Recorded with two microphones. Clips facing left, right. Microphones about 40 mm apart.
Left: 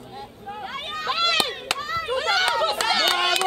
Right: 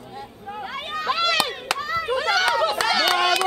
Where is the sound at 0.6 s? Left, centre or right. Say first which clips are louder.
Even; centre.